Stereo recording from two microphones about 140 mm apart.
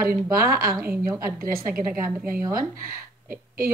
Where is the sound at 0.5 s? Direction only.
90° right.